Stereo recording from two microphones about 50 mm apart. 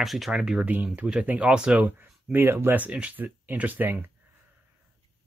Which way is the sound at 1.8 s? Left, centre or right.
Right.